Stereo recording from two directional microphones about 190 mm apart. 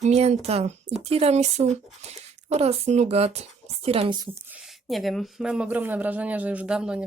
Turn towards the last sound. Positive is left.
turn(degrees=-5)  # may be behind; listen again after turning